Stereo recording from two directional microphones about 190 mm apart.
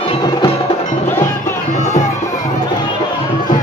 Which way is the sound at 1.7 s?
35° left (ahead or behind).